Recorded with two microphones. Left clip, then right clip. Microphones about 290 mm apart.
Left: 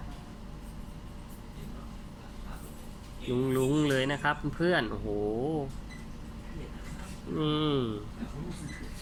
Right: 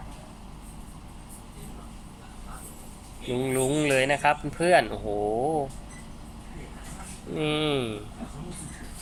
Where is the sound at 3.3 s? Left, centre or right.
Right.